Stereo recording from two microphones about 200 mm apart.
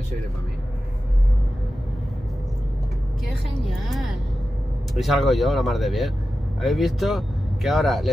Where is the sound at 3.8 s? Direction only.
Centre (ahead or behind).